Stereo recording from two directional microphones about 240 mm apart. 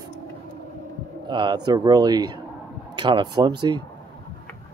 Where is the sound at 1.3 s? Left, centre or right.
Centre.